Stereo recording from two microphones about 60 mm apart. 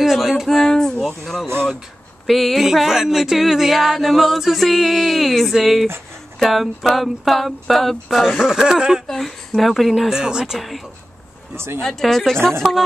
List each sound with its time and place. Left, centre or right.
0.0 s a sound: centre
1.2 s speech: centre
2.2 s music: centre
9.0 s music: centre
11.5 s speech: right
11.8 s music: centre